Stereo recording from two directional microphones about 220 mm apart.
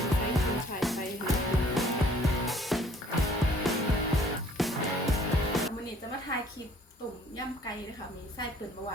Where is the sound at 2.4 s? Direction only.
Centre (ahead or behind).